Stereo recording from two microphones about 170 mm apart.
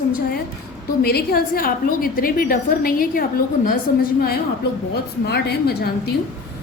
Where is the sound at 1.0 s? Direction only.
65° left (ahead or behind).